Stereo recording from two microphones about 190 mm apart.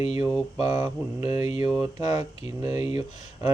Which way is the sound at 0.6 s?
20° right (ahead or behind).